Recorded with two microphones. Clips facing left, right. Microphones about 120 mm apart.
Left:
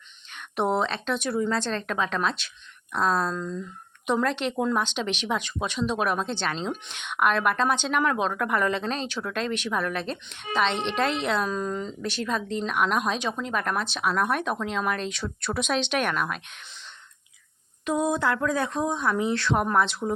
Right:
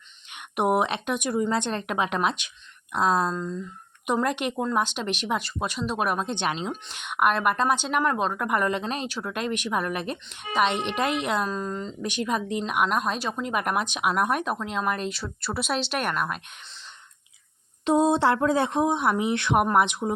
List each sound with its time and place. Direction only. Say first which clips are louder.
0.3 s speech: right 2 dB; 15° right (ahead or behind)
6.7 s speech: left 1 dB; 5° right (ahead or behind)
12.0 s speech: right 3 dB; 15° right (ahead or behind)
17.8 s speech: right 4 dB; 25° right (ahead or behind)